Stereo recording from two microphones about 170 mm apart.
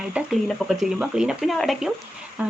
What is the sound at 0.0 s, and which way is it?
Speech, 5° right (ahead or behind).